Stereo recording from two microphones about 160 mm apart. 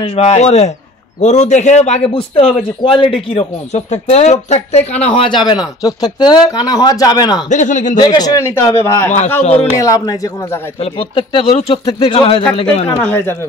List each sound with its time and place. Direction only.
0.0 s a man's voice: 40° left (ahead or behind)
5.5 s speech: 25° left (ahead or behind)
7.4 s speech: 50° left (ahead or behind)
8.0 s speech: 25° left (ahead or behind)
9.4 s a man's voice: 40° left (ahead or behind)
9.8 s speech: 20° left (ahead or behind)
10.8 s a man's voice: 35° left (ahead or behind)
13.0 s speech: 10° left (ahead or behind)